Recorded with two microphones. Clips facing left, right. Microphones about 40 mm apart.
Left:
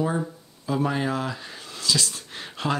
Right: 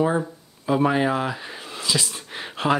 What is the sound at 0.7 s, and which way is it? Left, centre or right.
Speech, right.